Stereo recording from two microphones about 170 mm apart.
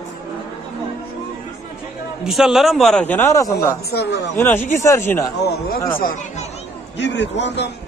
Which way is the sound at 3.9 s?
70° left (ahead or behind).